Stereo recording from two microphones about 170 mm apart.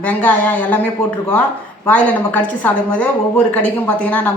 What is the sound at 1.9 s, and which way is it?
A woman's voice, 10° left (ahead or behind).